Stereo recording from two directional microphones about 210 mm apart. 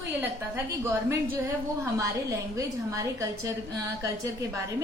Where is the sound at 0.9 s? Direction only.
15° right (ahead or behind).